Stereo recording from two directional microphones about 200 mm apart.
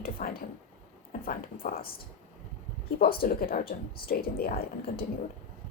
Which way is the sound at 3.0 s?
50° left (ahead or behind).